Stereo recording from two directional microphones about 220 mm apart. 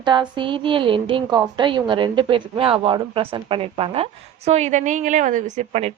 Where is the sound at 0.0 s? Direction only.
20° right (ahead or behind).